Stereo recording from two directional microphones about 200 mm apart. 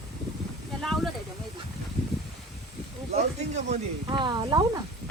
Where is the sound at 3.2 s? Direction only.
35° right (ahead or behind).